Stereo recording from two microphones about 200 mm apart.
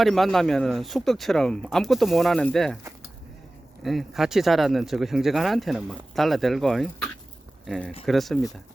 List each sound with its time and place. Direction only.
0.0 s speech: centre (ahead or behind)
3.8 s speech: centre (ahead or behind)